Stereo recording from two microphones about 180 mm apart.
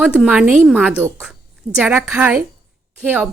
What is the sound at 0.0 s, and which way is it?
Speech, 5° right (ahead or behind).